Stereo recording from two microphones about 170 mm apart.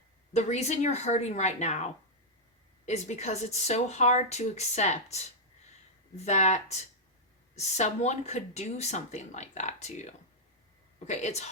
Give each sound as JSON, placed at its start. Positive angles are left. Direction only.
{"t": 0.3, "sound": "speech", "side_deg": 40}